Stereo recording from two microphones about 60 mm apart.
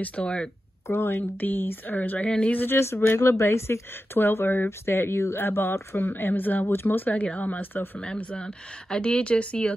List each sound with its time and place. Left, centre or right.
0.0 s speech: centre
0.8 s speech: left
2.5 s speech: left
2.8 s speech: left
8.0 s speech: centre